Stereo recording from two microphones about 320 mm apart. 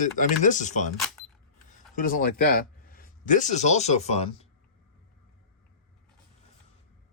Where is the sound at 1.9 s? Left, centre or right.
Left.